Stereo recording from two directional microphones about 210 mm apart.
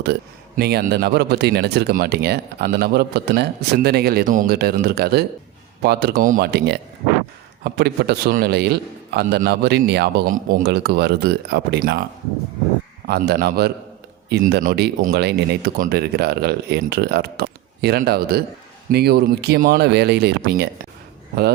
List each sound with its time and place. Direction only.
0.0 s speech: 50° right (ahead or behind)
13.1 s speech: 50° right (ahead or behind)